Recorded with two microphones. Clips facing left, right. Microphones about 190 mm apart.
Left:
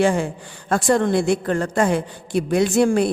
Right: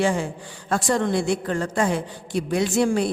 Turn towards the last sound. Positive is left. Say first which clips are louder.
# left 4 dB
turn(degrees=55)  # may be behind; listen again after turning